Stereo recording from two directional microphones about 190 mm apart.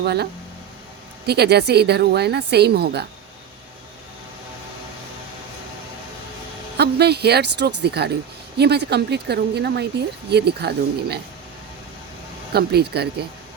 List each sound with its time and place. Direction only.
0.0 s a woman's voice: 60° right (ahead or behind)
1.3 s a woman's voice: 60° right (ahead or behind)
6.7 s a woman's voice: 60° right (ahead or behind)
12.5 s a woman's voice: 55° right (ahead or behind)